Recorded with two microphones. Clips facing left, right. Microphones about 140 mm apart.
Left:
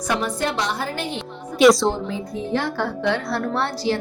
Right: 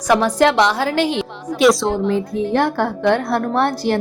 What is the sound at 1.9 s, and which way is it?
A woman's voice, 75° right (ahead or behind).